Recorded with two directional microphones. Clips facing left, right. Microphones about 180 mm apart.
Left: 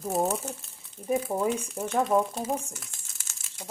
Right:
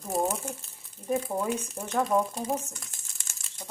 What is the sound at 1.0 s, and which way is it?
Speech, 10° left (ahead or behind).